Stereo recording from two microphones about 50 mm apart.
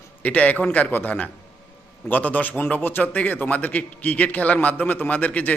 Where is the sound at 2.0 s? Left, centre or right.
Left.